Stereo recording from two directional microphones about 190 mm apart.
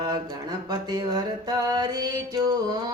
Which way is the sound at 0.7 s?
20° right (ahead or behind).